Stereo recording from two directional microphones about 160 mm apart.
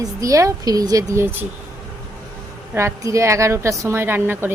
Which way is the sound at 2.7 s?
20° right (ahead or behind).